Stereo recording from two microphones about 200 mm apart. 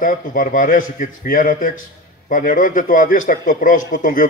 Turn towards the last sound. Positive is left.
turn(degrees=45)  # may be behind; listen again after turning